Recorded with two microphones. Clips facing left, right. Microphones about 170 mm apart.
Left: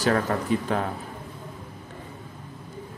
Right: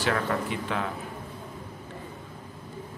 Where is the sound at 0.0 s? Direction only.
40° left (ahead or behind).